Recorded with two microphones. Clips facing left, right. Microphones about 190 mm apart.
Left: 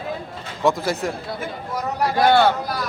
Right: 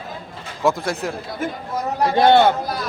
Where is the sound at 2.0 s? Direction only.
25° right (ahead or behind).